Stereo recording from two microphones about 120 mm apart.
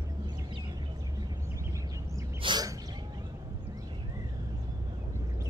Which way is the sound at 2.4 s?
35° right (ahead or behind).